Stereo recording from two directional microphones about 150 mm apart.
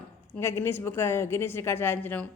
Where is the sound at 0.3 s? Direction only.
15° left (ahead or behind).